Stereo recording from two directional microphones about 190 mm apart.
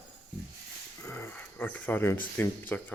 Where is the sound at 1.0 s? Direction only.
10° left (ahead or behind).